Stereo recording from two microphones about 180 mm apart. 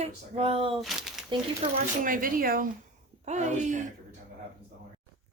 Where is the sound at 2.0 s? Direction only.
50° right (ahead or behind).